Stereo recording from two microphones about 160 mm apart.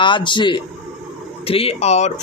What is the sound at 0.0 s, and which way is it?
A man's voice, 30° left (ahead or behind).